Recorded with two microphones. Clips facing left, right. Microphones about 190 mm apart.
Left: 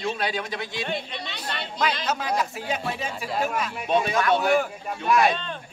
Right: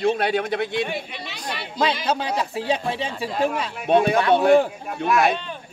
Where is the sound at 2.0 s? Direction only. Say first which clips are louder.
Right 2 dB; 30° right (ahead or behind).